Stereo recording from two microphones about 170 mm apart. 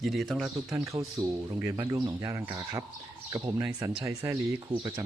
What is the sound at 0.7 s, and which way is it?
Speech, 20° right (ahead or behind).